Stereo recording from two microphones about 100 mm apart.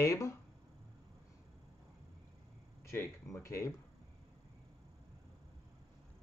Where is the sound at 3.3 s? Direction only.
30° left (ahead or behind).